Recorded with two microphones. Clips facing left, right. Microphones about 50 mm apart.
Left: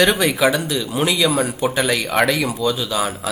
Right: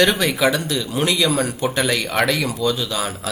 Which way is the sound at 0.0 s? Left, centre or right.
Centre.